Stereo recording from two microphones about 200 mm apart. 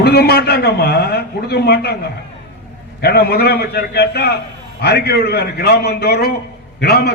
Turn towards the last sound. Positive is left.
turn(degrees=55)  # may be behind; listen again after turning